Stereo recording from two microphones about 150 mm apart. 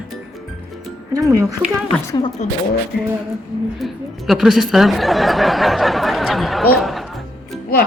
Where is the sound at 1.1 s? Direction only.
20° right (ahead or behind).